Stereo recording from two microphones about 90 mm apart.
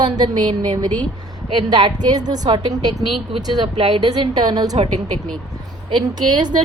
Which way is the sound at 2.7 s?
40° right (ahead or behind).